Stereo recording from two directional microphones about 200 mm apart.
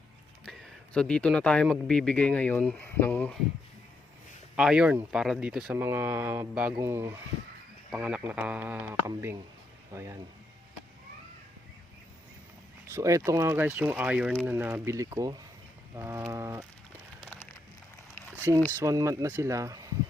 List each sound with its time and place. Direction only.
0.4 s speech: 5° left (ahead or behind)
4.5 s speech: 5° right (ahead or behind)
12.9 s speech: 15° right (ahead or behind)
18.3 s speech: 10° right (ahead or behind)